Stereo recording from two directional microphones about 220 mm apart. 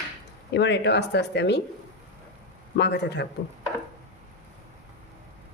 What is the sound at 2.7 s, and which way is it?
Speech, 50° left (ahead or behind).